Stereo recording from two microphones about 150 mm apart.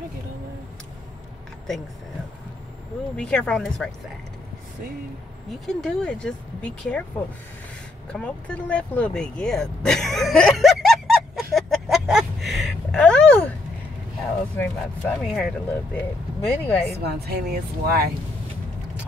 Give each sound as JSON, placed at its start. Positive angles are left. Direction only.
{"t": 3.2, "sound": "speech", "side_deg": 5}
{"t": 5.8, "sound": "speech", "side_deg": 5}
{"t": 8.1, "sound": "a sound", "side_deg": 5}
{"t": 14.6, "sound": "speech", "side_deg": 10}
{"t": 16.3, "sound": "speech", "side_deg": 10}
{"t": 17.0, "sound": "speech", "side_deg": -90}